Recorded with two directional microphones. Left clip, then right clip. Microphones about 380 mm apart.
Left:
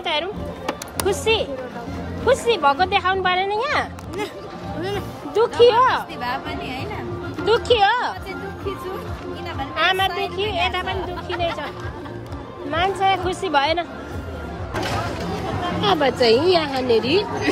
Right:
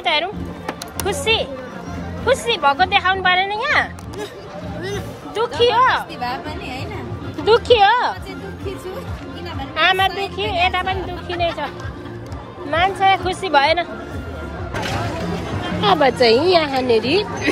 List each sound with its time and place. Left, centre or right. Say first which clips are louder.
0.0 s speech: right 4 dB; centre
4.8 s music: left 1 dB; left
5.4 s speech: left 1 dB; centre
7.4 s speech: right 4 dB; centre
9.8 s speech: right 3 dB; centre
12.7 s speech: right 4 dB; centre
15.8 s speech: right 4 dB; centre